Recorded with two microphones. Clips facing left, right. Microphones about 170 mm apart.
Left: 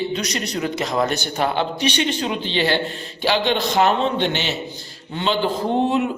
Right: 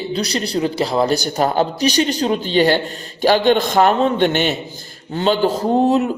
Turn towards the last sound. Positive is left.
turn(degrees=-40)  # may be behind; listen again after turning